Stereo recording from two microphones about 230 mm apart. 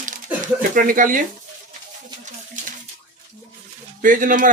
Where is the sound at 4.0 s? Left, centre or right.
Right.